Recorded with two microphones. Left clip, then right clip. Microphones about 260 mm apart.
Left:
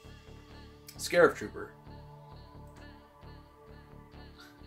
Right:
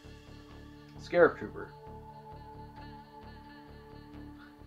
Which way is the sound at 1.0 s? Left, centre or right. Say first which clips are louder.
Even; left.